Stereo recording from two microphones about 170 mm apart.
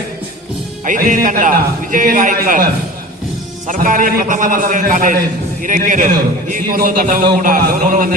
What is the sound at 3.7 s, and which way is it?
A man's voice, 50° right (ahead or behind).